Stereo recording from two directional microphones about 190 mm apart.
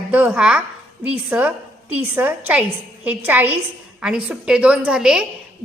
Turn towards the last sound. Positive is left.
turn(degrees=-5)  # may be behind; listen again after turning